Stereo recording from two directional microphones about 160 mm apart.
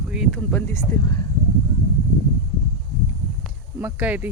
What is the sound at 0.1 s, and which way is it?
Speech, centre (ahead or behind).